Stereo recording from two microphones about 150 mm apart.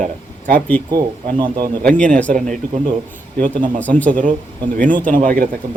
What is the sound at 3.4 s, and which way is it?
Speech, 60° right (ahead or behind).